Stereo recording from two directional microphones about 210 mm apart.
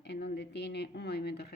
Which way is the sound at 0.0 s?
55° left (ahead or behind).